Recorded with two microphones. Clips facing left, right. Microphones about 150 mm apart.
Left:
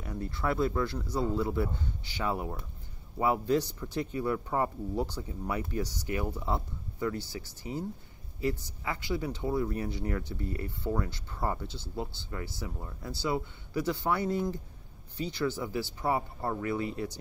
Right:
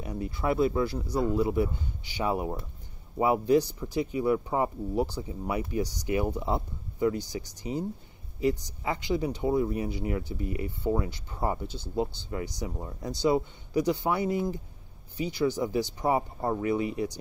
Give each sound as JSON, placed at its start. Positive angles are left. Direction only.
{"t": 0.0, "sound": "speech", "side_deg": -15}